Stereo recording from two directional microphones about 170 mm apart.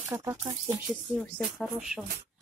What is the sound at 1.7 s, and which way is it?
Speech, 5° right (ahead or behind).